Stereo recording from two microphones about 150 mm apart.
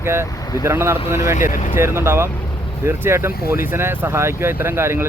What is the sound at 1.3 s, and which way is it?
Speech, 65° left (ahead or behind).